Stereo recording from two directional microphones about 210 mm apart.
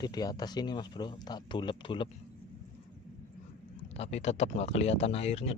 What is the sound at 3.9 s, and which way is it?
Speech, 30° left (ahead or behind).